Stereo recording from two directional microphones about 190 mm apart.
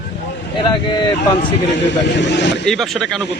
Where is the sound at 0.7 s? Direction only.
25° left (ahead or behind).